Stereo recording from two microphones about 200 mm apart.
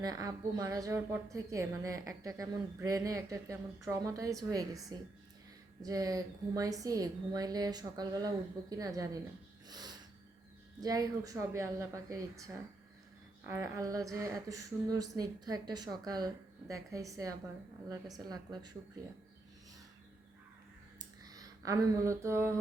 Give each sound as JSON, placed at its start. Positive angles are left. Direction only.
{"t": 0.0, "sound": "a woman's voice", "side_deg": -20}
{"t": 9.6, "sound": "snort", "side_deg": -20}
{"t": 10.8, "sound": "a woman's voice", "side_deg": -20}
{"t": 21.0, "sound": "a sound", "side_deg": -20}